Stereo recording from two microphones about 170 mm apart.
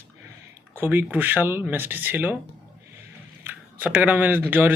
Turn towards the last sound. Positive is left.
turn(degrees=-10)  # may be behind; listen again after turning